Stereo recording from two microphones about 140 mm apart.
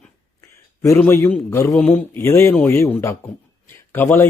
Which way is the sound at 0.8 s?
20° left (ahead or behind).